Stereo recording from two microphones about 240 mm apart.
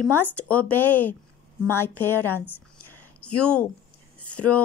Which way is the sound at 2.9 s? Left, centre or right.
Left.